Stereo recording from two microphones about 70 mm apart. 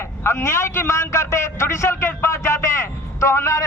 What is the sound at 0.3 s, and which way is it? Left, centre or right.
A man's voice, left.